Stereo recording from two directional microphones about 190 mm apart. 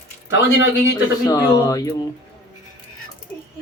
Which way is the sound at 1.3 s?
20° left (ahead or behind).